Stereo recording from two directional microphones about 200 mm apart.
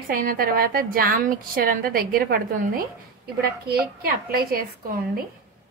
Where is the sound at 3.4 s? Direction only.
50° right (ahead or behind).